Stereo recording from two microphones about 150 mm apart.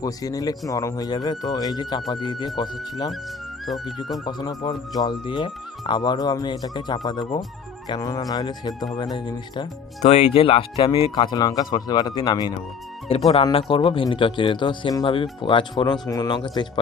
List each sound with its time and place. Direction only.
0.0 s speech: 25° left (ahead or behind)
3.7 s speech: centre (ahead or behind)
4.3 s speech: 30° left (ahead or behind)
10.0 s speech: 45° left (ahead or behind); by 12.5 s 30° left (ahead or behind)
13.1 s speech: 40° left (ahead or behind)